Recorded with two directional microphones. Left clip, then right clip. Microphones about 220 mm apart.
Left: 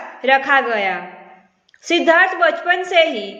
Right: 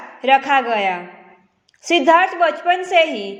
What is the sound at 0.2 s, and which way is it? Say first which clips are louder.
A woman's voice: even; 25° right (ahead or behind).